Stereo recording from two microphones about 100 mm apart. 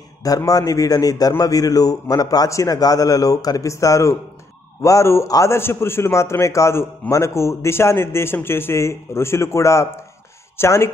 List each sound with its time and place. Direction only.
0.5 s a man's voice: 35° left (ahead or behind)